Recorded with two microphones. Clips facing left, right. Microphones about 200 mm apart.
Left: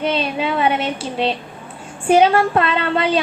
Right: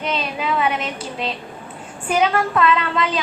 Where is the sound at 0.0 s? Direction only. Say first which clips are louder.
Left 4 dB; 30° left (ahead or behind).